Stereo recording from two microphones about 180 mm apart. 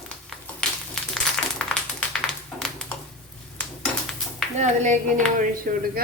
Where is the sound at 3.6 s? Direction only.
Centre (ahead or behind).